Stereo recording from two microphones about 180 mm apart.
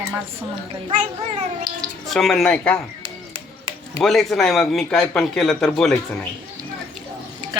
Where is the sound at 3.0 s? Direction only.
30° right (ahead or behind).